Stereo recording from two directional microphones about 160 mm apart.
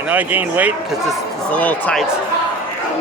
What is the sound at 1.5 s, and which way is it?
Speech, 10° left (ahead or behind).